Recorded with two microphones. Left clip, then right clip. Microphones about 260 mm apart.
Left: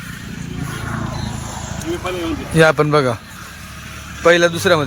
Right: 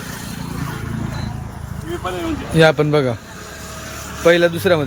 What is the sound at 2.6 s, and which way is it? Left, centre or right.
Speech, centre.